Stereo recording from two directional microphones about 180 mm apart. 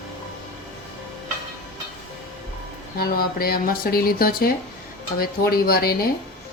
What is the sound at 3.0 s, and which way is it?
Speech, 55° left (ahead or behind).